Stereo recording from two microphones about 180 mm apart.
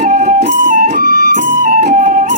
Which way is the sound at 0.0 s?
45° right (ahead or behind).